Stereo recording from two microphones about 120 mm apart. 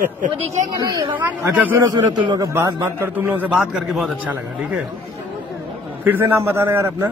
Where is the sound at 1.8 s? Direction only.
35° right (ahead or behind).